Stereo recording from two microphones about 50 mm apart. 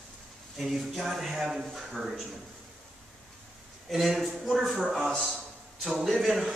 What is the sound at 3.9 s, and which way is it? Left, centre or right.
A man's voice, centre.